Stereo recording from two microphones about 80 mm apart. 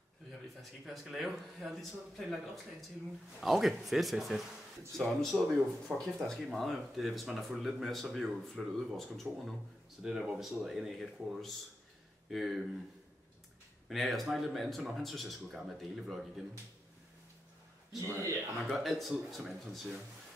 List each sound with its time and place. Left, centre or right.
0.6 s speech: centre
10.0 s speech: centre
13.8 s speech: centre
18.0 s speech: right
18.7 s speech: centre